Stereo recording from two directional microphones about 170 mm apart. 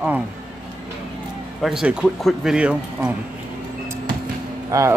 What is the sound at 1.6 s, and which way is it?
Speech, 5° right (ahead or behind).